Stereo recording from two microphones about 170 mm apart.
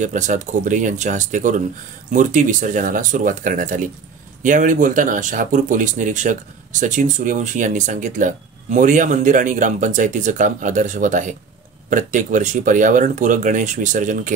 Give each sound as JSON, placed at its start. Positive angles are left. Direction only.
{"t": 0.0, "sound": "speech", "side_deg": -45}